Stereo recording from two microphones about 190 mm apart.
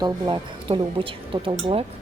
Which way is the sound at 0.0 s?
25° right (ahead or behind).